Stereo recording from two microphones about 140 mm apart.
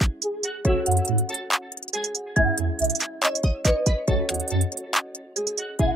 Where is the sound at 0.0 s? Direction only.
Centre (ahead or behind).